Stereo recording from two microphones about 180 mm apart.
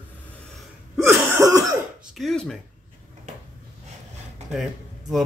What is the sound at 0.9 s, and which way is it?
Cough, 15° right (ahead or behind).